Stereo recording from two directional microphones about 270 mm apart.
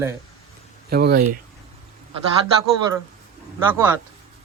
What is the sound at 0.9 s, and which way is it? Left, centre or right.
Speech, right.